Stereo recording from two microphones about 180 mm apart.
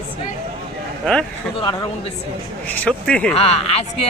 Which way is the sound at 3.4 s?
35° left (ahead or behind).